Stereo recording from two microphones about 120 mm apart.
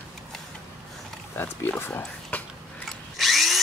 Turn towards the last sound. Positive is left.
turn(degrees=0)  # may be behind; listen again after turning